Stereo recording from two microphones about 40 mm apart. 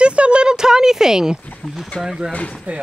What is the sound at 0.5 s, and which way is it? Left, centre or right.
Speech, centre.